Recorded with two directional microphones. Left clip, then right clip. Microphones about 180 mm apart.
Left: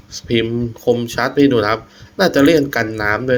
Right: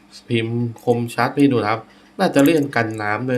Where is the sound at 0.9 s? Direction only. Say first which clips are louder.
Left 2 dB; 15° left (ahead or behind).